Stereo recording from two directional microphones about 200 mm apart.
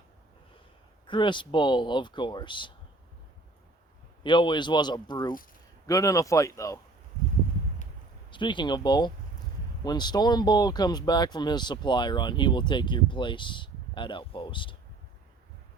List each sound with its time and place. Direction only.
1.0 s speech: 25° left (ahead or behind)
4.2 s speech: 25° left (ahead or behind)
8.3 s speech: 25° left (ahead or behind)